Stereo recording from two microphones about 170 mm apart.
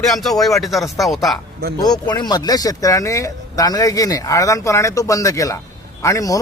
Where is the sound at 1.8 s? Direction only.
25° left (ahead or behind).